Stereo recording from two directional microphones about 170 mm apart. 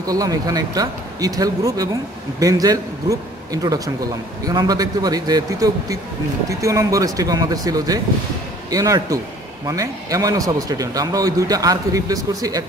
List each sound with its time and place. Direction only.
0.0 s a man's voice: 20° right (ahead or behind)